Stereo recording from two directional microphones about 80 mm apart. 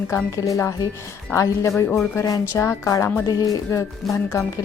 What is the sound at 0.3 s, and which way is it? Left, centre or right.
Speech, left.